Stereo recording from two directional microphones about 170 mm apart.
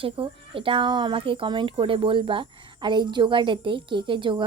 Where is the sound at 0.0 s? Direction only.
30° right (ahead or behind).